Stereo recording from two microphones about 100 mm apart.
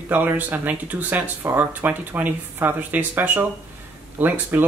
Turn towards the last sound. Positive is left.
turn(degrees=-20)  # may be behind; listen again after turning